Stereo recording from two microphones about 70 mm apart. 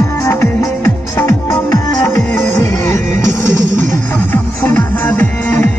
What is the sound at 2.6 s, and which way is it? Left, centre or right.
Music, left.